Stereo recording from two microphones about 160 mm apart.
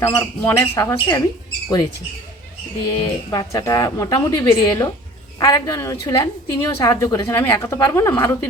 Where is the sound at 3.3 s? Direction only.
20° left (ahead or behind).